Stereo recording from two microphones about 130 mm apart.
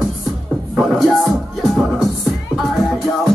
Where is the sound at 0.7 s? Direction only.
Centre (ahead or behind).